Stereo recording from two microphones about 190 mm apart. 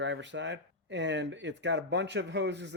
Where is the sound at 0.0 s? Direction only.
70° right (ahead or behind).